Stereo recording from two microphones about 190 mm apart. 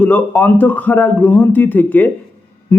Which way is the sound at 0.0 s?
10° left (ahead or behind).